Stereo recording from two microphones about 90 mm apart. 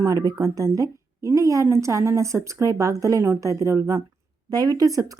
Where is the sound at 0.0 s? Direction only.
40° right (ahead or behind).